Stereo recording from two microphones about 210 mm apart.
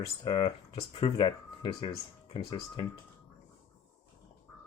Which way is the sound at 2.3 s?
25° left (ahead or behind).